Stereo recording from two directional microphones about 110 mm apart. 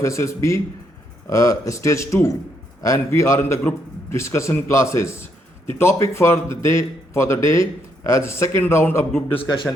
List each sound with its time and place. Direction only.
0.0 s speech: 25° left (ahead or behind)
9.3 s speech: 60° left (ahead or behind)